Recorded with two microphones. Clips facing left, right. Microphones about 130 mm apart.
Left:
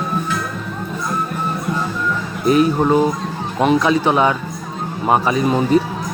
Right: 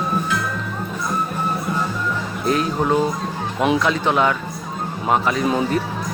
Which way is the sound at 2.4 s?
5° left (ahead or behind).